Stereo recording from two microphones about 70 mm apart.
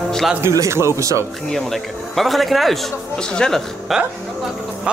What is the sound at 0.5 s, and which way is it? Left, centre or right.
Speech, right.